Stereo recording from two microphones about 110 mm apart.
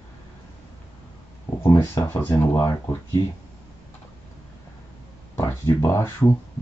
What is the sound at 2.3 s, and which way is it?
Speech, 30° left (ahead or behind).